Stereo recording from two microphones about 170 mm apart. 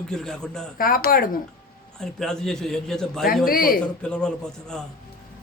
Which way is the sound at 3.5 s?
60° left (ahead or behind).